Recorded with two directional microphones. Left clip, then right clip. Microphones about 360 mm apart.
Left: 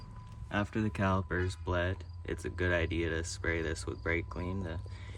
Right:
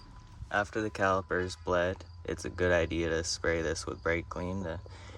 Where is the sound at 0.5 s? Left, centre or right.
Centre.